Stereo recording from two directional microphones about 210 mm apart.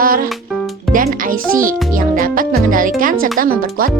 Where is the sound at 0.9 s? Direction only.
40° right (ahead or behind).